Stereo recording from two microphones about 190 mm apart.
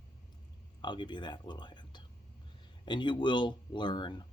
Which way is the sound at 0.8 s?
25° left (ahead or behind).